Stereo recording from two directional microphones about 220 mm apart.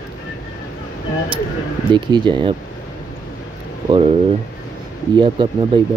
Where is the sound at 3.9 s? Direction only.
25° right (ahead or behind).